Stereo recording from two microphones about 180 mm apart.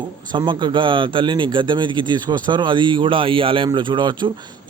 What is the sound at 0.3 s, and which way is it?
A man's voice, 25° right (ahead or behind).